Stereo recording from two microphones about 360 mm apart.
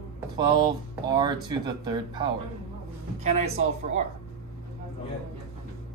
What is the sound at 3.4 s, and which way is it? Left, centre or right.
Speech, centre.